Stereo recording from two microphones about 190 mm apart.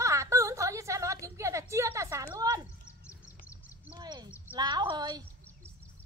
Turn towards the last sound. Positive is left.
turn(degrees=-20)  # may be behind; listen again after turning